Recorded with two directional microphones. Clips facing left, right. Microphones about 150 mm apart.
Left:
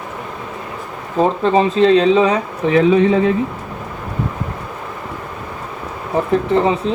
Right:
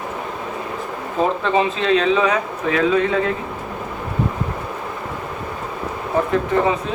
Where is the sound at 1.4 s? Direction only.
35° left (ahead or behind); by 3.3 s 20° left (ahead or behind).